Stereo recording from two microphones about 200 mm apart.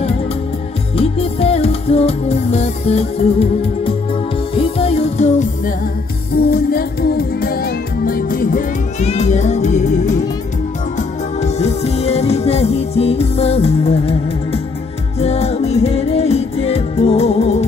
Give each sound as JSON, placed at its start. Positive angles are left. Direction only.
{"t": 0.9, "sound": "music", "side_deg": 30}
{"t": 6.5, "sound": "music", "side_deg": 50}